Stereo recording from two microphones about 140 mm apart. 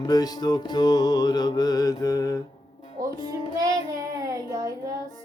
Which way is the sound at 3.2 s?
25° right (ahead or behind).